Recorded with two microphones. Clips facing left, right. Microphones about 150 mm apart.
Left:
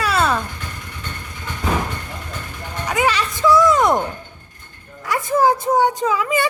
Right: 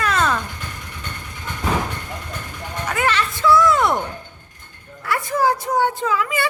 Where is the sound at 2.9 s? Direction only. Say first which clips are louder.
Left 2 dB; 15° left (ahead or behind).